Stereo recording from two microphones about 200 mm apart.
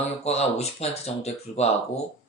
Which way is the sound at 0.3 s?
30° left (ahead or behind).